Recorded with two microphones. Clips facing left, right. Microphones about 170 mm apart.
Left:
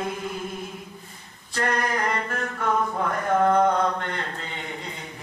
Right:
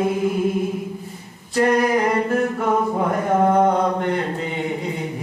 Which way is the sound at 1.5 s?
10° right (ahead or behind).